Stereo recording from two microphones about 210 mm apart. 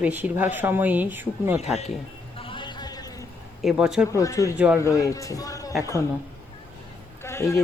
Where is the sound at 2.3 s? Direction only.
25° left (ahead or behind).